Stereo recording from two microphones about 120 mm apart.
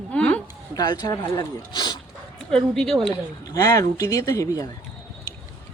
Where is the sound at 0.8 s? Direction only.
35° left (ahead or behind).